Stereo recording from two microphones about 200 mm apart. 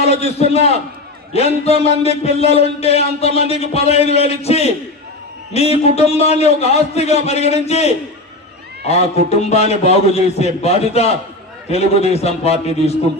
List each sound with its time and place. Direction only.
0.0 s a man's voice: 30° left (ahead or behind)